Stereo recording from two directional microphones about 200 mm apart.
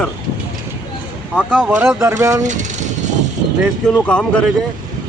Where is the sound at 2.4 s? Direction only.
35° right (ahead or behind).